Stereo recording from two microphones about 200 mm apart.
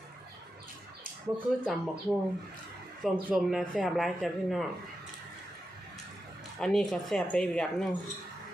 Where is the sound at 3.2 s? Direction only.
Centre (ahead or behind).